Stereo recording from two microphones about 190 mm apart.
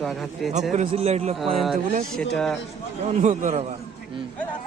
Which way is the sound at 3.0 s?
40° right (ahead or behind).